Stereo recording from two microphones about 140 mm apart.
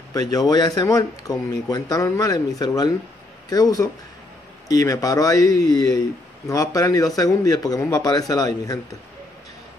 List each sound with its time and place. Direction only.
0.1 s a man's voice: 25° left (ahead or behind)